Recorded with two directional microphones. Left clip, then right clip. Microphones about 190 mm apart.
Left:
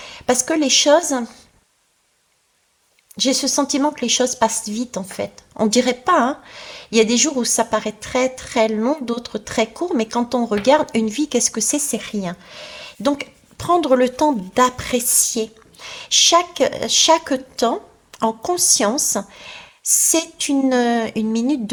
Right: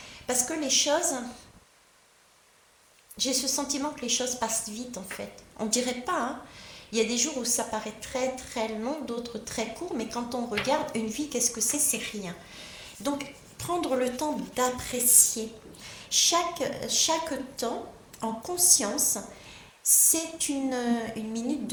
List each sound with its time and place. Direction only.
0.0 s a woman's voice: 45° left (ahead or behind)
3.2 s a woman's voice: 50° left (ahead or behind)